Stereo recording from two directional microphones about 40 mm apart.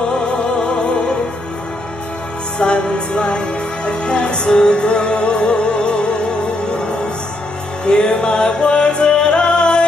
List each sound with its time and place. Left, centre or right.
0.1 s music: centre
2.6 s music: left